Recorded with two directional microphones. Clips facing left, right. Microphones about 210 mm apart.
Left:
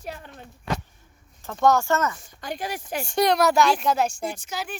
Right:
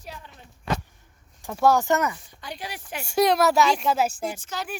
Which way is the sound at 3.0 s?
5° right (ahead or behind).